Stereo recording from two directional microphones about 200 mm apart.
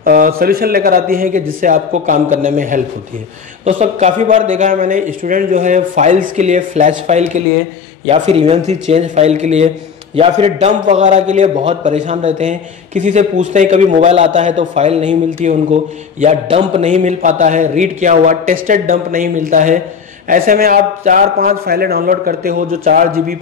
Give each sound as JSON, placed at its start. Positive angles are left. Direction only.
{"t": 0.0, "sound": "a man's voice", "side_deg": -45}